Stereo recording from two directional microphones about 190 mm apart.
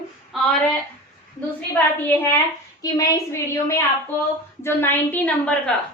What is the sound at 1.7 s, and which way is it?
A woman's voice, 10° left (ahead or behind).